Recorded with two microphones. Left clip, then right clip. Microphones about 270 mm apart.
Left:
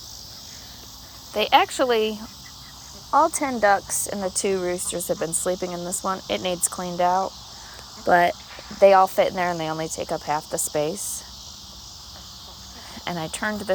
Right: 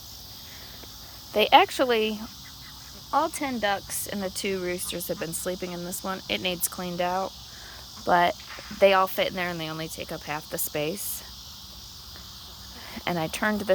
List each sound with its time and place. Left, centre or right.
1.3 s speech: centre
13.1 s speech: centre